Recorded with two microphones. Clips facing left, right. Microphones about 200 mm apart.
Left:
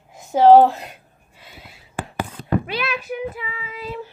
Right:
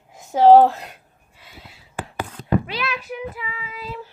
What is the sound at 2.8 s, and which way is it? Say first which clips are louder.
Child singing: left 2 dB; 25° left (ahead or behind).